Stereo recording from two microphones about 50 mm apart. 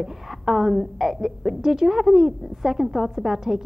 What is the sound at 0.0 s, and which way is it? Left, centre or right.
A woman's voice, centre.